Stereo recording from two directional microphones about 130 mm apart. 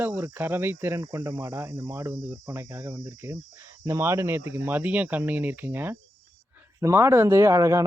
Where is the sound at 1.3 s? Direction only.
30° right (ahead or behind).